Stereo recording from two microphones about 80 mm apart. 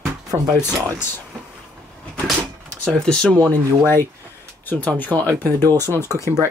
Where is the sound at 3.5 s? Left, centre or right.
Left.